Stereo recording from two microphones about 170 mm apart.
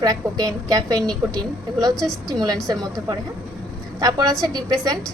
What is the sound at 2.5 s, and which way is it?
A woman's voice, 25° right (ahead or behind).